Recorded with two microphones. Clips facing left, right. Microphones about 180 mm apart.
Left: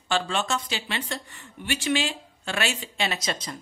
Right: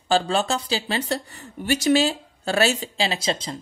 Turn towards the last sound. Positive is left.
turn(degrees=-25)  # may be behind; listen again after turning